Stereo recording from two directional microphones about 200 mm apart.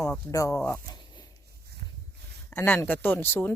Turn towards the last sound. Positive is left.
turn(degrees=10)  # may be behind; listen again after turning